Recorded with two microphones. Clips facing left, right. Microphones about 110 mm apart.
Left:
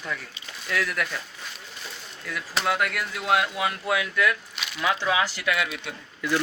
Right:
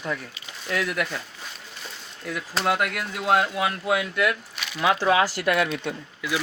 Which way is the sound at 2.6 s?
5° right (ahead or behind).